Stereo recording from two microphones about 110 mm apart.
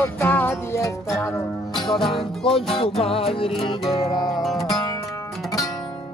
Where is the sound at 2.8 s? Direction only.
60° left (ahead or behind).